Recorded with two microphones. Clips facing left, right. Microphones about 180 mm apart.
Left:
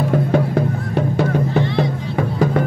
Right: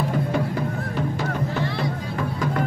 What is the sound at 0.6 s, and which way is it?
Music, 60° left (ahead or behind).